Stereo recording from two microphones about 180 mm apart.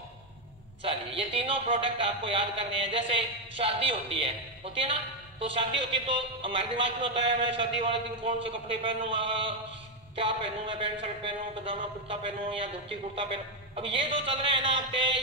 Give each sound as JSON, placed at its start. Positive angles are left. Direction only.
{"t": 0.8, "sound": "a man's voice", "side_deg": -30}